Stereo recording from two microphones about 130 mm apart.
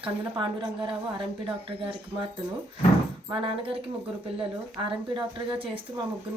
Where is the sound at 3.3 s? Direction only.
40° right (ahead or behind).